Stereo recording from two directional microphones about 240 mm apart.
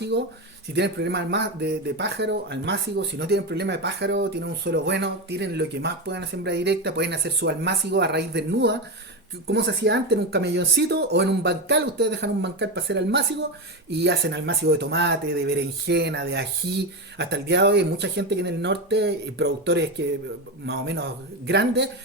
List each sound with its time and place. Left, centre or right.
0.1 s speech: right